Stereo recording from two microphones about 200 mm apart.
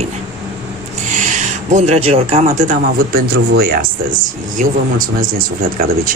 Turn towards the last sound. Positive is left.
turn(degrees=-45)  # may be behind; listen again after turning